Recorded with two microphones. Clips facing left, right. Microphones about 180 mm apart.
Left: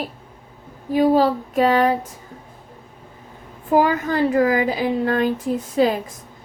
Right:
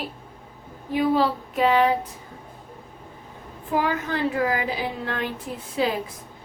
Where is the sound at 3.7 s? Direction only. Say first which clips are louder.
Left 7 dB; 45° left (ahead or behind).